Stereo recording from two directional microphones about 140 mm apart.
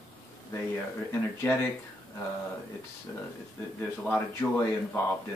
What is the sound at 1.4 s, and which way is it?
Speech, 20° left (ahead or behind).